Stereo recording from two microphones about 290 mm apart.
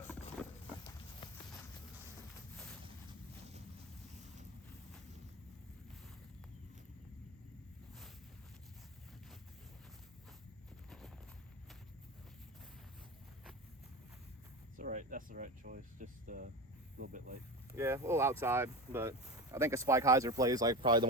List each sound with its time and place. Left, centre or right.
0.4 s a sound: centre
1.2 s walk: centre
2.8 s a sound: centre
10.8 s clip-clop: centre
14.8 s speech: right
17.7 s speech: centre